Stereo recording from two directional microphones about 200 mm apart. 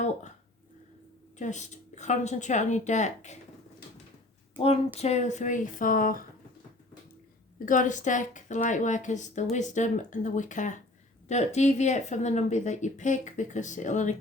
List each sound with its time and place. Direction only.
1.4 s a woman's voice: 35° left (ahead or behind)
4.5 s a woman's voice: 30° left (ahead or behind)
7.6 s a woman's voice: 40° left (ahead or behind)